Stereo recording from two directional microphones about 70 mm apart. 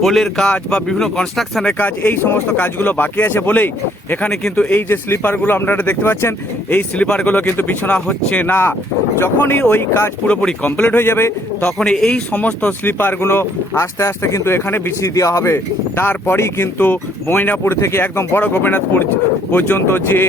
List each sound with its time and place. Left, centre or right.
0.0 s speech: centre
1.8 s speech: left
4.3 s speech: centre
4.9 s speech: left
6.9 s speech: centre; by 10.1 s left
10.2 s speech: centre
10.9 s speech: left
11.6 s speech: centre; by 14.9 s left
15.1 s speech: left
17.6 s speech: left